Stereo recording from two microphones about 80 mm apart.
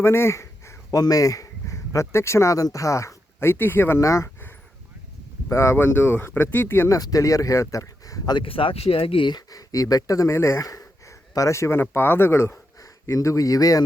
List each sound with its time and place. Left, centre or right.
0.0 s a sound: left
0.9 s speech: left
5.5 s speech: left
6.8 s speech: left
8.4 s speech: left
9.5 s speech: left
10.3 s speech: left